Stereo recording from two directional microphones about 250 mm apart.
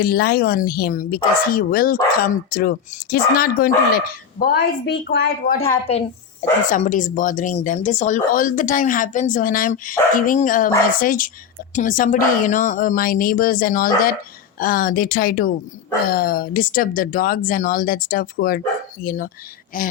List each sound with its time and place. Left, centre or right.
0.0 s speech: left
6.7 s speech: left